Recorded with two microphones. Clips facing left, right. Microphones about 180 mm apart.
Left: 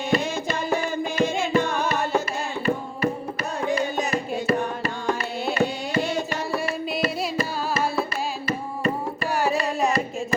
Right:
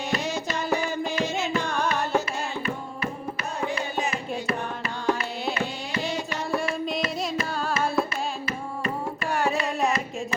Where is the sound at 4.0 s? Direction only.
40° left (ahead or behind).